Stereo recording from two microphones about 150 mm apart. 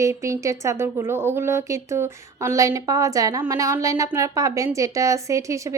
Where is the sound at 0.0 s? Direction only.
20° right (ahead or behind).